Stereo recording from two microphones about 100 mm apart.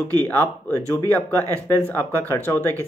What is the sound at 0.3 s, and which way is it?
Speech, 20° left (ahead or behind).